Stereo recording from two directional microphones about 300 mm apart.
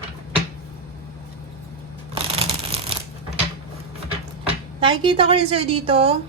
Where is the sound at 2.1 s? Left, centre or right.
Centre.